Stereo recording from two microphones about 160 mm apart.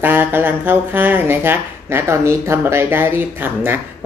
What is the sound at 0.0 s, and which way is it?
A woman's voice, 10° right (ahead or behind).